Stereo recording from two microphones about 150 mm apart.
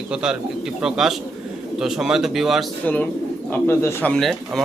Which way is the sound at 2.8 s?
10° left (ahead or behind).